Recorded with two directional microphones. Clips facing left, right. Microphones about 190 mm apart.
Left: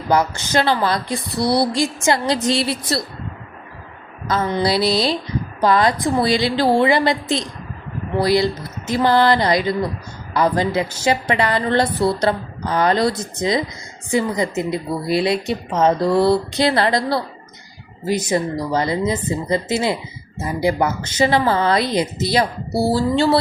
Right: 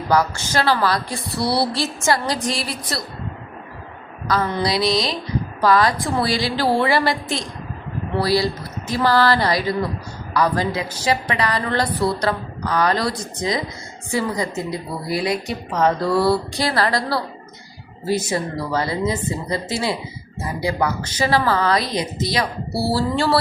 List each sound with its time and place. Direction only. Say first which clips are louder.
0.1 s a woman's voice: left 2 dB; 20° left (ahead or behind)
4.3 s a woman's voice: left 2 dB; 25° left (ahead or behind)
22.8 s a woman's voice: left 3 dB; 15° left (ahead or behind)